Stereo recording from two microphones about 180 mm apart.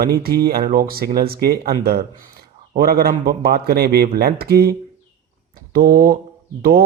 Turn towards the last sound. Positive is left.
turn(degrees=-55)  # may be behind; listen again after turning